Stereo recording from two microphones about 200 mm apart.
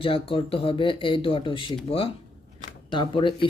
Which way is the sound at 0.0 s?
25° left (ahead or behind).